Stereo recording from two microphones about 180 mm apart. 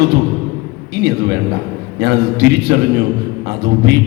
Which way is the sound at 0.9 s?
70° right (ahead or behind).